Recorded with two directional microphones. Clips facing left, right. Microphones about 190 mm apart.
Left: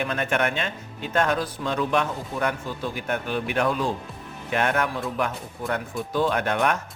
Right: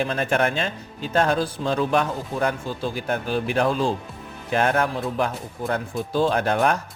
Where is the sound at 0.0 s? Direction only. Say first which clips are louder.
Right 3 dB; 35° right (ahead or behind).